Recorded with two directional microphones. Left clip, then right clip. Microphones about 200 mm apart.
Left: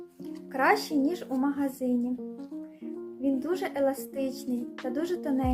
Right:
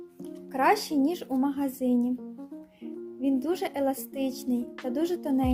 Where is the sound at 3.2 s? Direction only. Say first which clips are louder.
Right 1 dB; 35° right (ahead or behind).